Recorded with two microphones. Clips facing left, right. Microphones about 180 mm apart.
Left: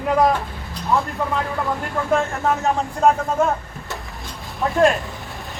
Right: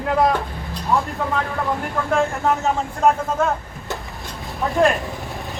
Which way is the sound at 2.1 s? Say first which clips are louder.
Even; centre (ahead or behind).